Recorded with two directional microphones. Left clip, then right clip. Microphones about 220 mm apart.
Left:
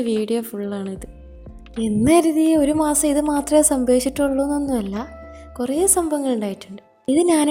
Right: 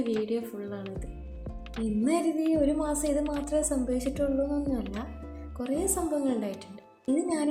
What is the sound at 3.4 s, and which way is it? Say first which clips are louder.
A woman's voice: left 12 dB; 45° left (ahead or behind).